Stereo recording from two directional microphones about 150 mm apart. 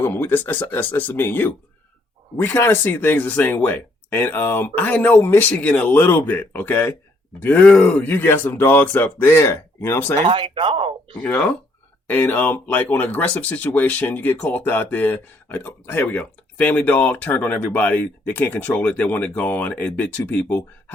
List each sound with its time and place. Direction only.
0.0 s speech: 15° left (ahead or behind)
10.2 s speech: 35° right (ahead or behind)
11.2 s speech: 10° left (ahead or behind)